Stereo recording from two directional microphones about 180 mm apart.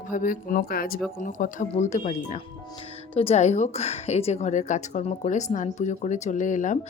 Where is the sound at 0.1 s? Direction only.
50° left (ahead or behind).